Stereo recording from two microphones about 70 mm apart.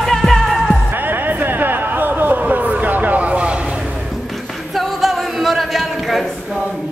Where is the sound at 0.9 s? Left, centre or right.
Right.